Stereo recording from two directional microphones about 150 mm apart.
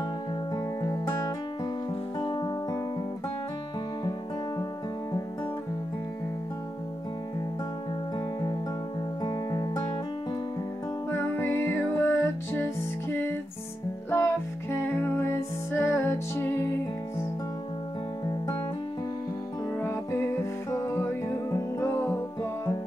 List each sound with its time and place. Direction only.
2.1 s music: 30° left (ahead or behind)
9.2 s music: 25° left (ahead or behind)
11.1 s music: 15° left (ahead or behind)
14.1 s music: 20° left (ahead or behind)
19.8 s music: 15° left (ahead or behind)